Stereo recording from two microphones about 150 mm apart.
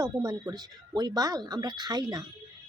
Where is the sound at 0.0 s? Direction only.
25° right (ahead or behind).